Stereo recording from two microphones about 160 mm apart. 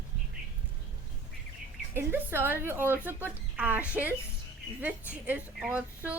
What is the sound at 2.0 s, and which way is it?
A woman's voice, 15° right (ahead or behind).